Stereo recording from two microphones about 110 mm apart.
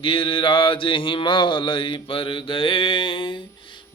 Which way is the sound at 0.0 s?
55° left (ahead or behind).